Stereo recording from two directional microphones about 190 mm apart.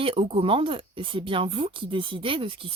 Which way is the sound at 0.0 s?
30° right (ahead or behind).